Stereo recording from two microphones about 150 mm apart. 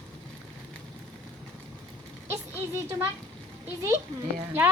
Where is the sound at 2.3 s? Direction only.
15° right (ahead or behind).